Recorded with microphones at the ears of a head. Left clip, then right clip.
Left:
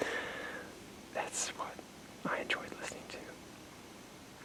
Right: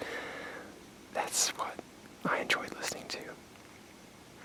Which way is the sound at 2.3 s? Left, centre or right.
Right.